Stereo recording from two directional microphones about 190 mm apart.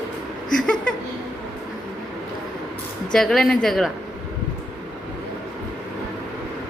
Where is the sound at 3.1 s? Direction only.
Centre (ahead or behind).